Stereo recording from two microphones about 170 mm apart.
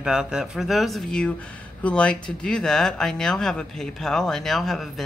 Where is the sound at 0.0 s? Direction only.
5° right (ahead or behind).